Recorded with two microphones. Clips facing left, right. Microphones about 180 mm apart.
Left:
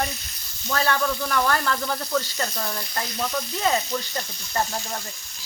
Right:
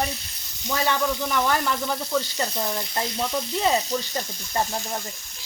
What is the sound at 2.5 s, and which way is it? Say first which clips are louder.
Speech: right 3 dB; 20° right (ahead or behind).